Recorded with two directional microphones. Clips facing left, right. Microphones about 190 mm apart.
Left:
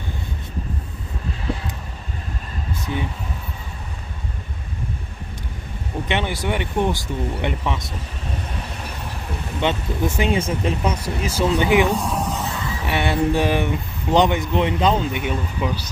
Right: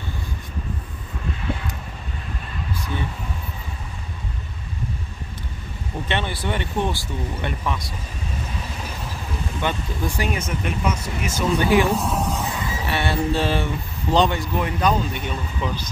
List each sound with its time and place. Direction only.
6.0 s speech: 15° left (ahead or behind)
9.6 s speech: 20° left (ahead or behind)
11.9 s speech: centre (ahead or behind)
12.8 s speech: 15° left (ahead or behind)
15.2 s speech: 10° left (ahead or behind)